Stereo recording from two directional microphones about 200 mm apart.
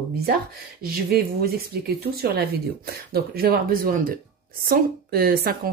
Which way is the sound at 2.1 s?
50° right (ahead or behind).